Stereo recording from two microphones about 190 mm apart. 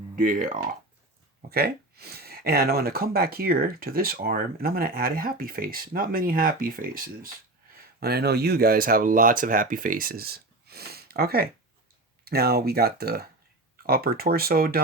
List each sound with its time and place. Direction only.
0.2 s speech: 45° right (ahead or behind)